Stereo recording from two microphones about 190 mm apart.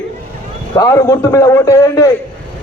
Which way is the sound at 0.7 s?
15° left (ahead or behind).